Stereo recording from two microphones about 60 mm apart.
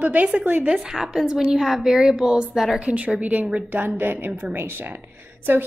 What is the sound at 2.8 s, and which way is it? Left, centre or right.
A woman's voice, centre.